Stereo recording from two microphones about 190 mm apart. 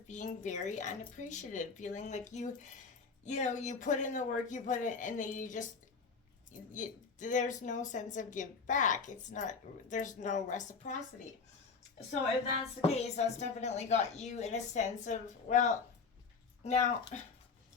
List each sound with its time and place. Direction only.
0.1 s a woman's voice: 40° left (ahead or behind)
6.7 s a woman's voice: 40° left (ahead or behind)
12.8 s a woman's voice: 35° left (ahead or behind)